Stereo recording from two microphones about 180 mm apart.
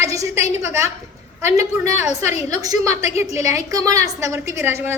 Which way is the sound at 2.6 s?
20° right (ahead or behind).